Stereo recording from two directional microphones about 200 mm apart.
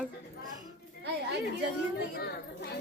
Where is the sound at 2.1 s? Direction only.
55° left (ahead or behind).